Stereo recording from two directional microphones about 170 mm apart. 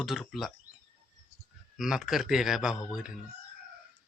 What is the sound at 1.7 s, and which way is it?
A man's voice, centre (ahead or behind).